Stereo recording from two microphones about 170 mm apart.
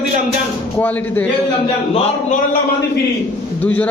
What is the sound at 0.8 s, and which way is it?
Speech, 10° left (ahead or behind).